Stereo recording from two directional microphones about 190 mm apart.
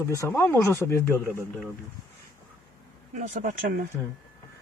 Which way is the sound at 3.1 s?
40° right (ahead or behind).